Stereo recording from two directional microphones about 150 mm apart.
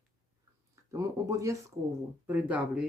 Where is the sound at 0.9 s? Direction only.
20° right (ahead or behind).